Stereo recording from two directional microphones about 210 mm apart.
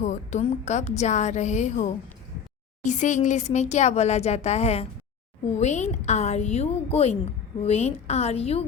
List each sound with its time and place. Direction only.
0.0 s a woman's voice: 35° left (ahead or behind)